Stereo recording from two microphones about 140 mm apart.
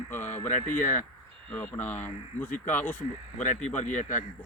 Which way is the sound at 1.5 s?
10° left (ahead or behind).